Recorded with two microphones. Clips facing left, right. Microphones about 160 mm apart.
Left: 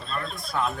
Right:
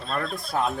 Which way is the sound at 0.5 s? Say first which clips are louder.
Right 2 dB; 40° right (ahead or behind).